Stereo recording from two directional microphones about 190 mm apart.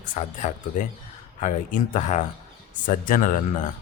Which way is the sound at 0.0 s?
40° left (ahead or behind).